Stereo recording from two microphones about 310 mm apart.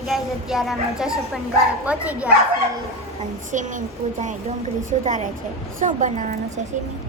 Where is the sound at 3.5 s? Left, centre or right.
Right.